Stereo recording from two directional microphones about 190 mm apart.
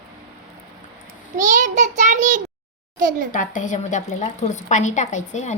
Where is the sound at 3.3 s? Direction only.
45° left (ahead or behind).